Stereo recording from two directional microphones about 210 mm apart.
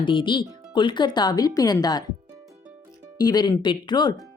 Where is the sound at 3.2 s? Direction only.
20° left (ahead or behind).